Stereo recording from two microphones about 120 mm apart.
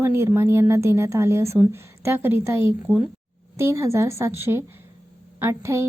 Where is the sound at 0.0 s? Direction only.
20° right (ahead or behind).